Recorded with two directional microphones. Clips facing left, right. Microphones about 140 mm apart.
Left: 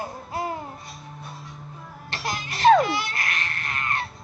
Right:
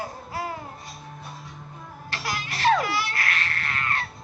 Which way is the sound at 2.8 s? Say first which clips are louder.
Left 3 dB; 20° left (ahead or behind).